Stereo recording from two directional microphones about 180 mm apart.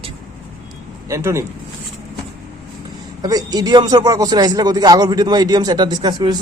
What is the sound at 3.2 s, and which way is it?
Speech, 20° right (ahead or behind).